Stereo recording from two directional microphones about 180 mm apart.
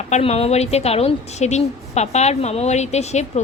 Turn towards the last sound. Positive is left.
turn(degrees=40)  # may be behind; listen again after turning